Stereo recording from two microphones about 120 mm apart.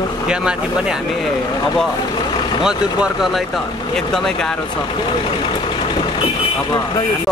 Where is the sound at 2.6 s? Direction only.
5° right (ahead or behind).